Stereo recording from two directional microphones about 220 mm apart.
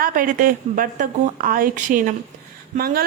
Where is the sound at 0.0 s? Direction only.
40° right (ahead or behind).